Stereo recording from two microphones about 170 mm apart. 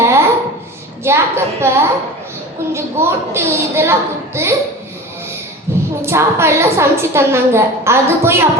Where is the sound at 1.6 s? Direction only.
15° right (ahead or behind).